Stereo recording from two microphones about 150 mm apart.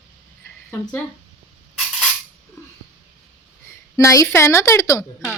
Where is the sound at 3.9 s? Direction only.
20° left (ahead or behind).